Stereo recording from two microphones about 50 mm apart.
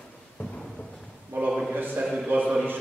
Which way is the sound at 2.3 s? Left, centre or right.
Right.